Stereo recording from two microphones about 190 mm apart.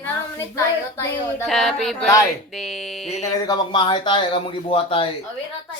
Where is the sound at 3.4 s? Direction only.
25° left (ahead or behind).